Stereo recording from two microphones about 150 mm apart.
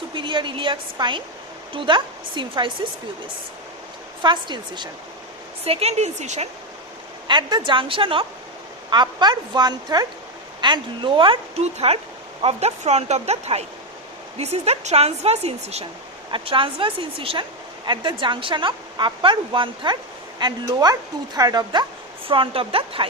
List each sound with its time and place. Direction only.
0.1 s a woman's voice: 35° right (ahead or behind)
4.2 s a woman's voice: 30° right (ahead or behind)
5.6 s speech: 45° right (ahead or behind)
7.3 s a woman's voice: 30° right (ahead or behind)